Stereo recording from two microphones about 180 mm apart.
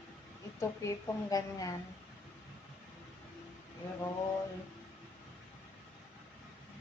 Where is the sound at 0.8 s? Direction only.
20° left (ahead or behind).